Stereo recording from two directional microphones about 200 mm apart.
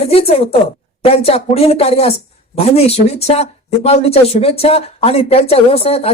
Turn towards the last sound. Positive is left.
turn(degrees=30)  # may be behind; listen again after turning